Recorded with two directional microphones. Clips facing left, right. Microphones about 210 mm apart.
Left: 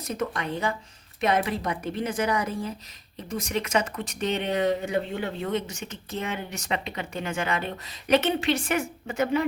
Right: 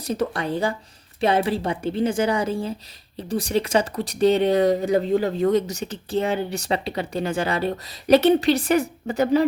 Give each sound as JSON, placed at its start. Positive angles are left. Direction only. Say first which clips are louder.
{"t": 0.0, "sound": "a woman's voice", "louder": "right 5 dB", "side_deg": -35}